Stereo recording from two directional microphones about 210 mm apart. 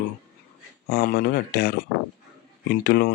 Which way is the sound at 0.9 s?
45° left (ahead or behind).